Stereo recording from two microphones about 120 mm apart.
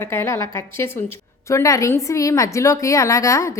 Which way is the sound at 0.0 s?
20° left (ahead or behind).